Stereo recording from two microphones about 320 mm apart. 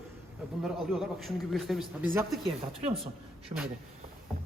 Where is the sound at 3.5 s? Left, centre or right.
Centre.